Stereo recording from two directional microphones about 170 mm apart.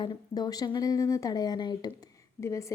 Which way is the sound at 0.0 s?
25° left (ahead or behind).